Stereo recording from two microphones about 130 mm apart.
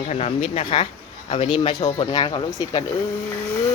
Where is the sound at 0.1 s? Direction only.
55° left (ahead or behind); by 2.8 s 30° left (ahead or behind).